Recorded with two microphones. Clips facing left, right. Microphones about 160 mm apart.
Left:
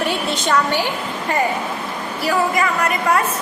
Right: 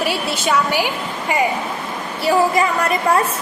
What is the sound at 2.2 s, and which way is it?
Speech, 25° right (ahead or behind).